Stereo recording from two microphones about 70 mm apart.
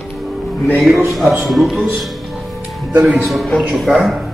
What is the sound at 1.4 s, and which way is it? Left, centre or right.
Speech, centre.